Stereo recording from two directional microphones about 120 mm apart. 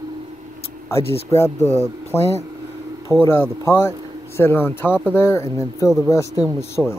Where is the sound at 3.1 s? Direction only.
20° left (ahead or behind).